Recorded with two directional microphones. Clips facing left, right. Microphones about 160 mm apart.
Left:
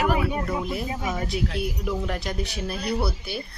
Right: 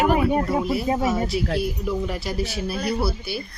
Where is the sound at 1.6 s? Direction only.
Centre (ahead or behind).